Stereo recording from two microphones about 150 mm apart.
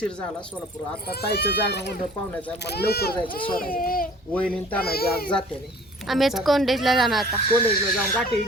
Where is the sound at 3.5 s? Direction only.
70° left (ahead or behind).